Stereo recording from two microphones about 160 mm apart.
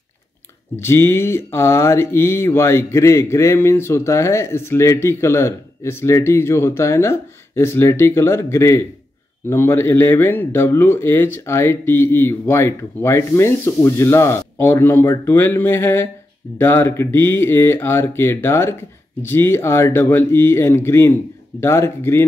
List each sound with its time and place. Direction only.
0.7 s mantra: 15° left (ahead or behind)